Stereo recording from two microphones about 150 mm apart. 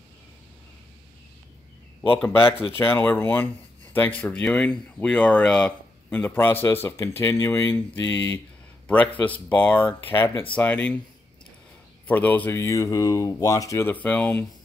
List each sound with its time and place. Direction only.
2.0 s speech: 15° left (ahead or behind)
12.1 s speech: 10° left (ahead or behind)